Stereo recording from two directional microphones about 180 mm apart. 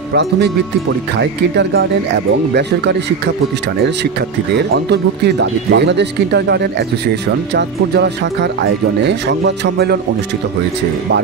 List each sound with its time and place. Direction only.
0.1 s speech: 70° right (ahead or behind)
4.6 s speech: 65° right (ahead or behind)